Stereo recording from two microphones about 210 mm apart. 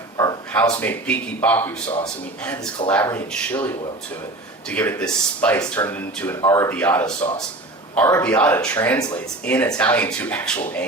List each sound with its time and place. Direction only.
0.2 s a sound: 15° left (ahead or behind)
0.8 s speech: 5° left (ahead or behind)
2.9 s speech: 10° left (ahead or behind)